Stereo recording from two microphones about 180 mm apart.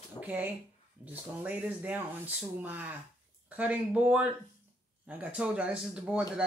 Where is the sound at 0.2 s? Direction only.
10° right (ahead or behind).